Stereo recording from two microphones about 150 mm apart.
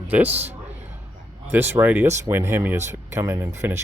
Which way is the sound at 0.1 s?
10° right (ahead or behind).